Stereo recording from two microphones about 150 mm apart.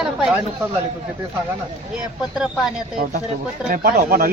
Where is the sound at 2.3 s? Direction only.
5° right (ahead or behind).